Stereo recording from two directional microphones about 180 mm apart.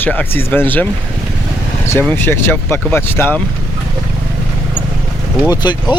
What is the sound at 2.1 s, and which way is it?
Speech, 10° left (ahead or behind).